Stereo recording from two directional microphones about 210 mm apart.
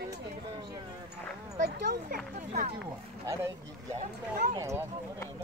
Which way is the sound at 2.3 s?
40° right (ahead or behind).